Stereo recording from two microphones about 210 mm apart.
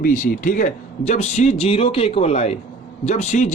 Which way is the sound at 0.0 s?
40° left (ahead or behind).